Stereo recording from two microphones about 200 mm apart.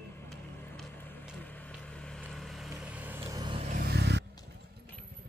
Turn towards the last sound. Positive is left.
turn(degrees=-55)  # may be behind; listen again after turning